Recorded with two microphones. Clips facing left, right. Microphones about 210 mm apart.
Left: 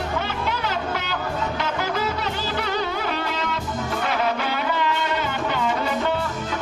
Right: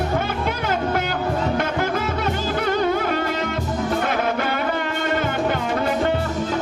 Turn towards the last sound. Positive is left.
turn(degrees=-50)  # may be behind; listen again after turning